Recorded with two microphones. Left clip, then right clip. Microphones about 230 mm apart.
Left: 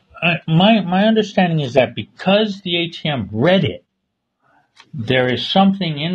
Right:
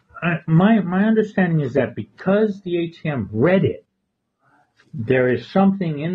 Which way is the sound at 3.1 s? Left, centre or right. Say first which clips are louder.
Left 2 dB; left.